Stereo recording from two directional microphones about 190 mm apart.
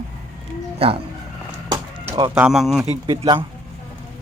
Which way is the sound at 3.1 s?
25° right (ahead or behind).